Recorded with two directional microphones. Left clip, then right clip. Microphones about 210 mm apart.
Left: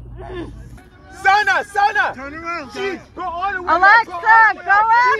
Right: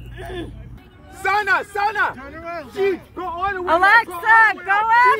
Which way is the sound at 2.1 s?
25° left (ahead or behind).